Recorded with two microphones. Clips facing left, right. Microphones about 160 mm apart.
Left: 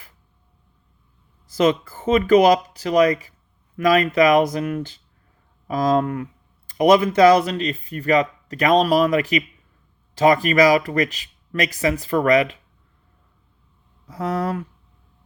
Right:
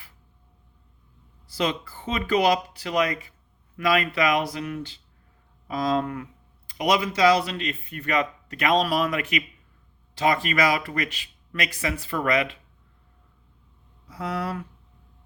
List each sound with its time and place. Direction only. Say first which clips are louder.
1.5 s speech: left 8 dB; 45° left (ahead or behind)
14.1 s speech: left 6 dB; 40° left (ahead or behind)